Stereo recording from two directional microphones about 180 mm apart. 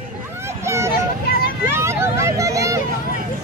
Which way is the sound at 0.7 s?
15° right (ahead or behind).